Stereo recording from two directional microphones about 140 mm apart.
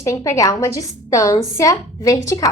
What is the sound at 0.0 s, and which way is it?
A woman's voice, 25° left (ahead or behind).